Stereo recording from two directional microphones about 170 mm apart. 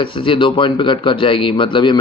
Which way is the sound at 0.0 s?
30° left (ahead or behind).